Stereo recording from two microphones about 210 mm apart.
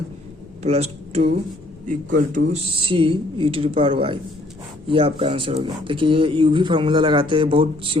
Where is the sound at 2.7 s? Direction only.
25° right (ahead or behind).